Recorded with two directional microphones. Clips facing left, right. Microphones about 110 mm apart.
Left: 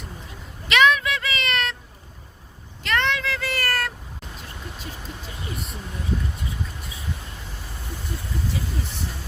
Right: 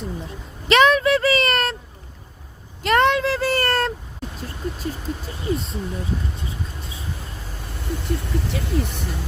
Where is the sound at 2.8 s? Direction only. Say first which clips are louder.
Right 7 dB; 45° right (ahead or behind).